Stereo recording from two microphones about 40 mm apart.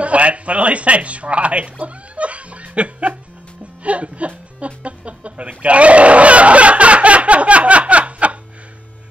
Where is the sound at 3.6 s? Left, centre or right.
Right.